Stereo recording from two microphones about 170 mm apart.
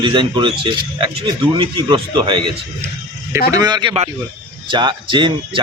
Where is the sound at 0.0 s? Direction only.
30° right (ahead or behind).